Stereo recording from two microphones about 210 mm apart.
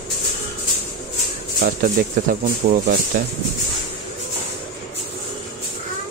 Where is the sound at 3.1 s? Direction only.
40° right (ahead or behind).